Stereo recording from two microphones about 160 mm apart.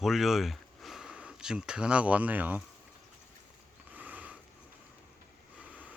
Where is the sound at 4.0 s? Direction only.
10° right (ahead or behind).